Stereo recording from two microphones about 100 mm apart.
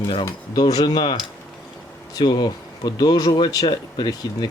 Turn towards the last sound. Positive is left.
turn(degrees=45)  # may be behind; listen again after turning